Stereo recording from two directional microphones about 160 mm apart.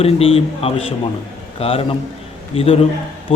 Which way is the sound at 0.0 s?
35° left (ahead or behind).